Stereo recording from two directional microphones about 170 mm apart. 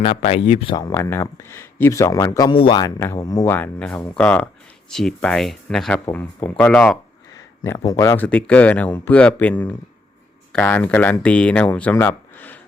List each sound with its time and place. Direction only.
0.2 s speech: 35° left (ahead or behind)
0.8 s speech: 20° left (ahead or behind)
3.0 s speech: 15° left (ahead or behind)
7.8 s speech: 20° left (ahead or behind)